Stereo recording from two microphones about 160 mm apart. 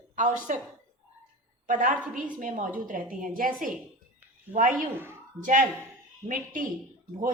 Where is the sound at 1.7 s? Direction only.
55° right (ahead or behind).